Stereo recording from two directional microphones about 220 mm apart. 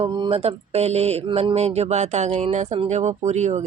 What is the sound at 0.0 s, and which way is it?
Speech, 25° right (ahead or behind).